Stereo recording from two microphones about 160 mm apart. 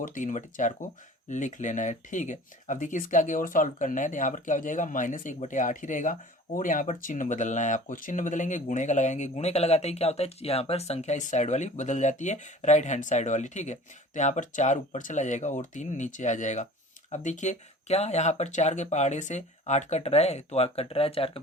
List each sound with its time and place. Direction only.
0.0 s speech: 55° left (ahead or behind); by 21.2 s 35° left (ahead or behind)